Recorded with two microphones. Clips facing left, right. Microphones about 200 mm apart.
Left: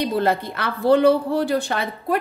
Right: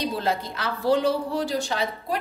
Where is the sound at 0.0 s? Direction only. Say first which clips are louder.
Left 5 dB; 60° left (ahead or behind).